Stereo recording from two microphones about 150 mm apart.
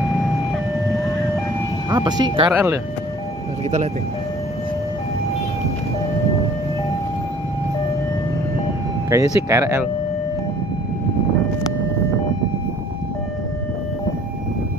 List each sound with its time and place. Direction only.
1.9 s speech: 25° right (ahead or behind)
2.5 s speech: 10° right (ahead or behind)
9.1 s speech: 20° right (ahead or behind)